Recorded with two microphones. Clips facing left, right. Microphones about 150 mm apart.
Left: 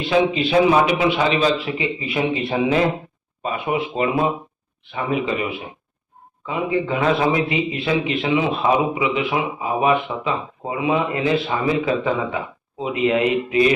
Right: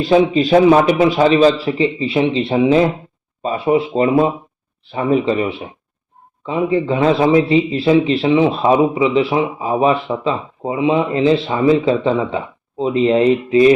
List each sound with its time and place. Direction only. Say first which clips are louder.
0.0 s a man's voice: right 5 dB; 40° right (ahead or behind)